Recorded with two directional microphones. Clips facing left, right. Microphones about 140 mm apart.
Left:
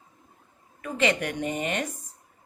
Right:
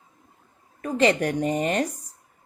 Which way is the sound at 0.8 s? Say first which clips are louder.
Right 5 dB; 35° right (ahead or behind).